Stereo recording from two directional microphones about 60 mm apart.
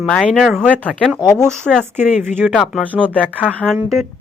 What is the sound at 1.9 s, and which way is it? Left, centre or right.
Speech, right.